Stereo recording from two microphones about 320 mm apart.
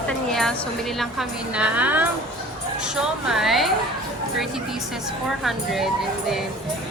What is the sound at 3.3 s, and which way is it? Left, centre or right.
Speech, centre.